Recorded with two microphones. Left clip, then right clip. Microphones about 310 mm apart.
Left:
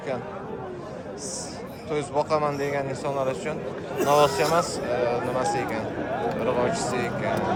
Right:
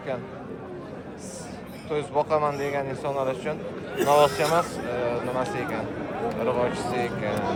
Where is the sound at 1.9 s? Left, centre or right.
Centre.